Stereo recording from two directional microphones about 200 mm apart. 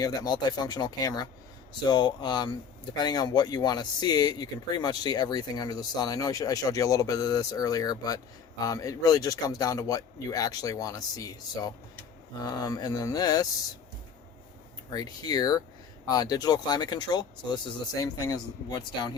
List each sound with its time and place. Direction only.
0.0 s speech: 20° left (ahead or behind)
14.8 s speech: 20° left (ahead or behind)